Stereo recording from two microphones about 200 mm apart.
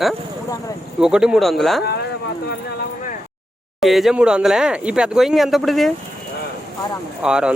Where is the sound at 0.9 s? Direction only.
5° right (ahead or behind).